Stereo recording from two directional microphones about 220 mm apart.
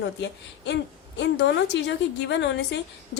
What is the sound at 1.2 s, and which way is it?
A woman's voice, 55° left (ahead or behind).